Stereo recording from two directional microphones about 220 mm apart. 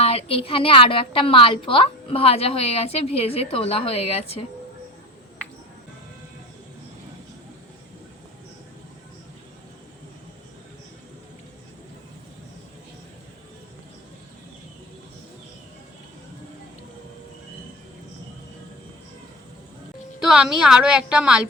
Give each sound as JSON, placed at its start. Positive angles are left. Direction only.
{"t": 0.0, "sound": "a woman's voice", "side_deg": 25}
{"t": 20.1, "sound": "a woman's voice", "side_deg": -5}